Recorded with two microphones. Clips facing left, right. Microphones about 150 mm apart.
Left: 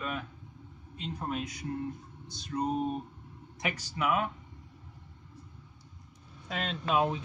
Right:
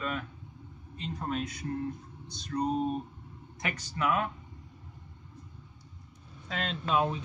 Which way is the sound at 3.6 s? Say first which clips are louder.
Even; 10° left (ahead or behind).